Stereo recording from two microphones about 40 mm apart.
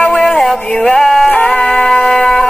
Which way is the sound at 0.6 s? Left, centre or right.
Centre.